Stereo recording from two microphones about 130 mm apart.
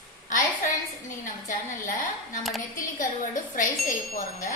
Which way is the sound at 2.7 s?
90° left.